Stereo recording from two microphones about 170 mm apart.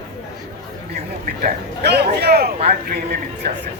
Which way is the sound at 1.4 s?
75° right (ahead or behind).